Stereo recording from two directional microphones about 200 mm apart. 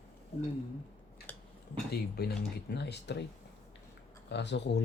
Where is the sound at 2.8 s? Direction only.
55° left (ahead or behind).